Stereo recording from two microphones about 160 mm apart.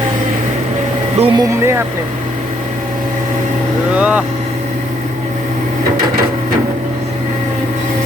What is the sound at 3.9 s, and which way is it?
Vehicle, 10° right (ahead or behind).